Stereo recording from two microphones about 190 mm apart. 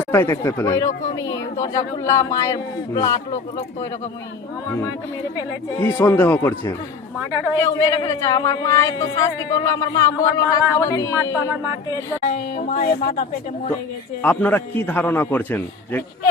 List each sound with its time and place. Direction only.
0.1 s speech: 15° left (ahead or behind)
5.8 s speech: 10° left (ahead or behind)
12.3 s speech: 40° left (ahead or behind)
14.2 s speech: 10° left (ahead or behind)